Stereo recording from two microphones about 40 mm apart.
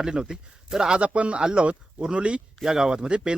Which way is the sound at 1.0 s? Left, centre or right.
Right.